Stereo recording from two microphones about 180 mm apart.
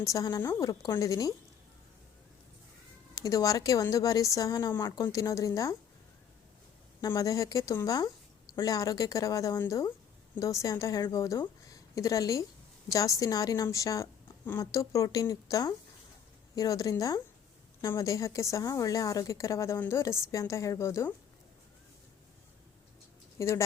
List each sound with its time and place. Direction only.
0.0 s a woman's voice: 20° left (ahead or behind)
3.2 s a woman's voice: 20° left (ahead or behind)
7.0 s a woman's voice: 20° left (ahead or behind)
23.4 s a woman's voice: 15° left (ahead or behind)